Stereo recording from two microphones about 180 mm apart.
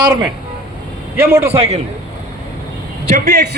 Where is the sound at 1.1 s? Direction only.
15° right (ahead or behind).